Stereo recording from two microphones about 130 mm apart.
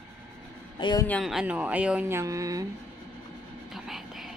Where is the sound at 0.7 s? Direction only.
35° left (ahead or behind).